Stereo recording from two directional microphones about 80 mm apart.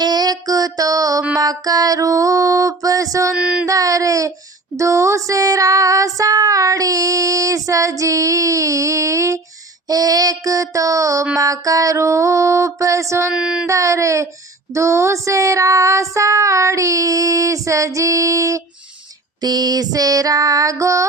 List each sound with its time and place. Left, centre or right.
0.0 s music: right
1.4 s child singing: right
3.3 s music: centre
3.7 s child singing: right
9.8 s child singing: right
13.3 s music: centre
13.7 s child singing: right
19.4 s child singing: right